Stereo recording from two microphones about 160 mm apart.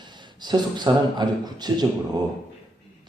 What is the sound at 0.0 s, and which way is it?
A man's voice, 25° right (ahead or behind).